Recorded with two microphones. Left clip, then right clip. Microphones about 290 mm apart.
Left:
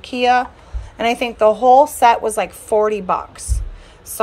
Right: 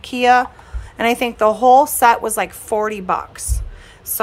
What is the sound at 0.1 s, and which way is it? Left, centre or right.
A woman's voice, right.